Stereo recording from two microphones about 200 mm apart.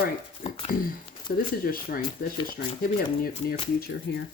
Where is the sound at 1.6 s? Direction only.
45° left (ahead or behind).